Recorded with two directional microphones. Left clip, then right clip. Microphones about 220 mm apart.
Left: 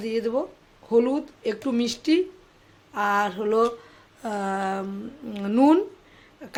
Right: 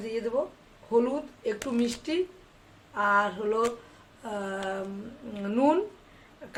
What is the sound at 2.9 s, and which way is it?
Speech, 40° left (ahead or behind).